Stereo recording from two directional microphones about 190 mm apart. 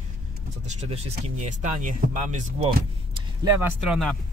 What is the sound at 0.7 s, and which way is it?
Speech, 35° right (ahead or behind).